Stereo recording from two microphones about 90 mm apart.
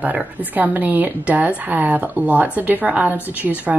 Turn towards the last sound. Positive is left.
turn(degrees=-20)  # may be behind; listen again after turning